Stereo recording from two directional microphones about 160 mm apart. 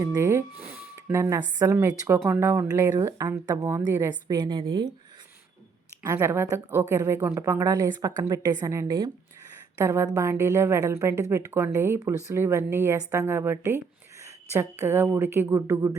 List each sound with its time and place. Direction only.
0.0 s a woman's voice: 20° right (ahead or behind)
6.0 s a woman's voice: 20° right (ahead or behind)